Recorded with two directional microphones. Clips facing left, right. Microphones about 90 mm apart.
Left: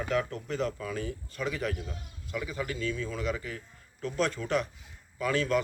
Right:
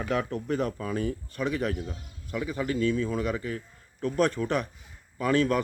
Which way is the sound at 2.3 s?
40° right (ahead or behind).